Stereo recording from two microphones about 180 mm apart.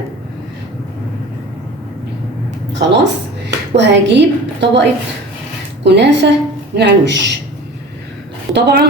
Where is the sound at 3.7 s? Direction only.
75° right (ahead or behind).